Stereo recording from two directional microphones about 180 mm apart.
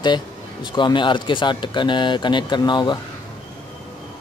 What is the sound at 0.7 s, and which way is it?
Speech, 25° left (ahead or behind).